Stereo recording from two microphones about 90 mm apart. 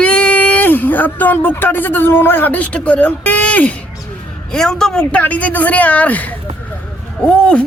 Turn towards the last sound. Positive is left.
turn(degrees=10)  # may be behind; listen again after turning